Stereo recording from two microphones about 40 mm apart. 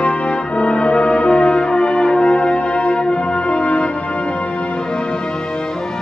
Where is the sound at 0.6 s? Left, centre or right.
Left.